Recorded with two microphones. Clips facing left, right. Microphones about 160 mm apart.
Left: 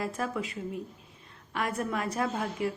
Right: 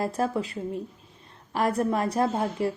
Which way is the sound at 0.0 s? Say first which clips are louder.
Right 6 dB; 35° right (ahead or behind).